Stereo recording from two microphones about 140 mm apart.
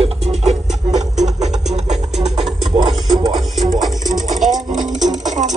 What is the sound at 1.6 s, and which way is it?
Music, 55° right (ahead or behind).